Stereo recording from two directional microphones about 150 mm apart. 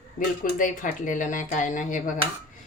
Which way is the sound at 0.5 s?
60° left (ahead or behind).